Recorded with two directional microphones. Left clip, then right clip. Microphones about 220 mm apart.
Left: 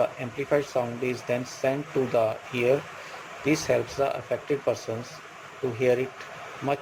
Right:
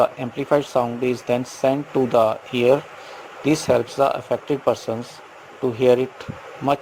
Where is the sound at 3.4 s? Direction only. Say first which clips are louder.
Right 6 dB; 30° right (ahead or behind).